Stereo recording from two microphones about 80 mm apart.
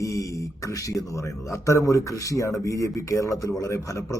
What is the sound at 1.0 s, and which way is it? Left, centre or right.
Speech, left.